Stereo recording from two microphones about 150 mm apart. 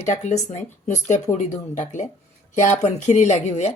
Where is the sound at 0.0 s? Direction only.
55° left (ahead or behind).